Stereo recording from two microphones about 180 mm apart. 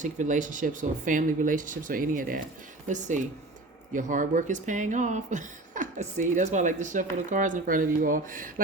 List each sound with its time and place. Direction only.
0.0 s speech: 45° right (ahead or behind)